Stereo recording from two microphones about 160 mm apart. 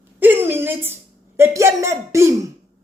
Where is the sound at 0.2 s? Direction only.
15° right (ahead or behind).